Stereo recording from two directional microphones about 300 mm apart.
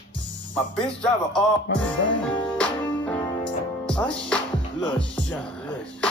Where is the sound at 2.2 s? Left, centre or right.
Centre.